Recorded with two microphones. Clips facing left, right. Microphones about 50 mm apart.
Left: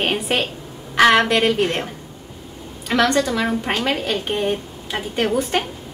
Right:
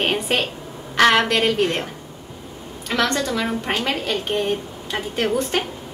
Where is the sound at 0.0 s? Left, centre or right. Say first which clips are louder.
Even; centre.